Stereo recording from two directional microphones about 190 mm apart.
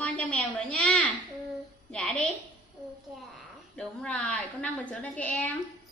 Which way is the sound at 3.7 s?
5° left (ahead or behind).